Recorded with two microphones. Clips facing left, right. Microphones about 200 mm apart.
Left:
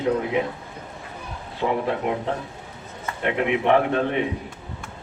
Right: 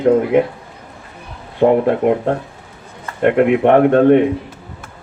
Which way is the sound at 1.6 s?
55° right (ahead or behind).